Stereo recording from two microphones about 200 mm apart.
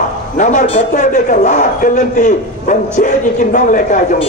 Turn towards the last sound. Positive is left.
turn(degrees=40)  # may be behind; listen again after turning